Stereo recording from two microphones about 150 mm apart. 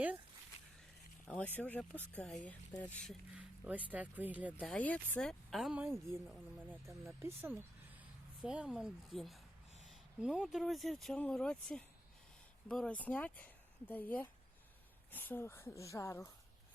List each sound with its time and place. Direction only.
1.3 s speech: 10° left (ahead or behind)
3.3 s speech: 10° right (ahead or behind)
4.6 s speech: 10° left (ahead or behind)
7.2 s speech: 15° right (ahead or behind); by 16.3 s 20° left (ahead or behind)